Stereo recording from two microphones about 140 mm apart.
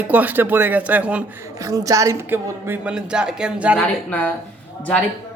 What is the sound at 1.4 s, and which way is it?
Speech, 25° right (ahead or behind).